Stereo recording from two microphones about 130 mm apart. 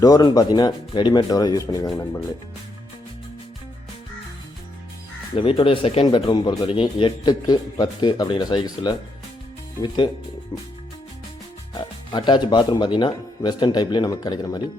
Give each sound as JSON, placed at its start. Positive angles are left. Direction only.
{"t": 0.0, "sound": "speech", "side_deg": 30}
{"t": 5.3, "sound": "speech", "side_deg": 45}
{"t": 6.1, "sound": "speech", "side_deg": 35}
{"t": 11.7, "sound": "speech", "side_deg": 35}